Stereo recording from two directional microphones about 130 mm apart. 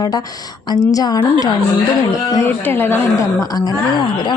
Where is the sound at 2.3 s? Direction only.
20° left (ahead or behind).